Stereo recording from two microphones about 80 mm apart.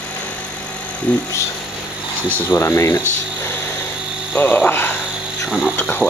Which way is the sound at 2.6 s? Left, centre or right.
Left.